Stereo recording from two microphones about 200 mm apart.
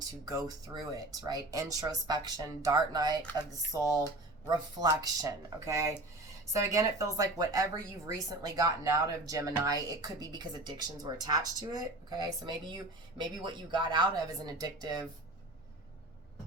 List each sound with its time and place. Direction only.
0.3 s speech: 20° right (ahead or behind)